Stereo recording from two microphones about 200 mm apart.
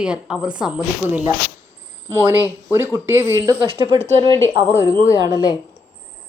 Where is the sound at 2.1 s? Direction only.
10° right (ahead or behind).